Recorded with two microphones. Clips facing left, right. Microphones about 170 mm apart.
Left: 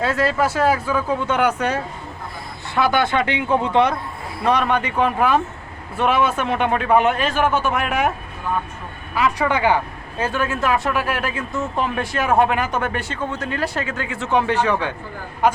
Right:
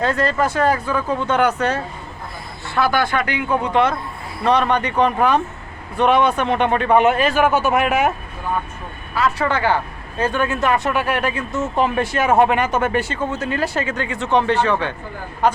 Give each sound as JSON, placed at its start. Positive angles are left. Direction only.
{"t": 0.0, "sound": "speech", "side_deg": 5}
{"t": 4.4, "sound": "speech", "side_deg": 10}
{"t": 9.1, "sound": "a man's voice", "side_deg": 10}